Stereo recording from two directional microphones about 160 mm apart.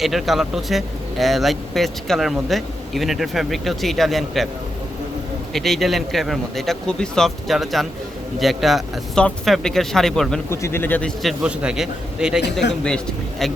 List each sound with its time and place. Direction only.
0.0 s speech: centre (ahead or behind)
5.5 s speech: centre (ahead or behind)
10.5 s speech: 15° left (ahead or behind); by 12.4 s 5° right (ahead or behind)
12.6 s speech: 90° left